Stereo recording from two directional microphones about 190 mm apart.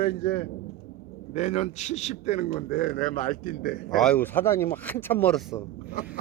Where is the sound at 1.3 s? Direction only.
40° left (ahead or behind).